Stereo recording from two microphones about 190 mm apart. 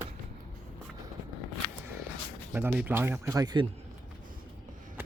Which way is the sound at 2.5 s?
10° right (ahead or behind).